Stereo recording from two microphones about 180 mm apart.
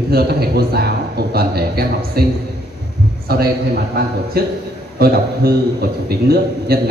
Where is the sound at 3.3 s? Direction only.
60° right (ahead or behind).